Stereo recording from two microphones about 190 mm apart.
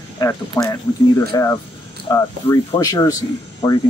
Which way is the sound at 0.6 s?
15° left (ahead or behind).